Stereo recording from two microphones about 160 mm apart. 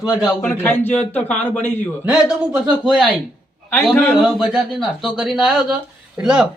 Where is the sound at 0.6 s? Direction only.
10° left (ahead or behind).